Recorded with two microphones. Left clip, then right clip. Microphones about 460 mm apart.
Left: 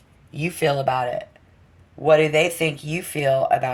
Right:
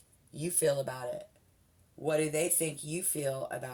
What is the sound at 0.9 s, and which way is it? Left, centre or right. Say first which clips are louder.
Speech: left 15 dB; right.